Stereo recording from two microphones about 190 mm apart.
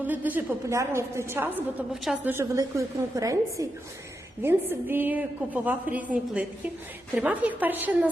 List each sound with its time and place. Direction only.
0.1 s a woman's voice: 10° right (ahead or behind)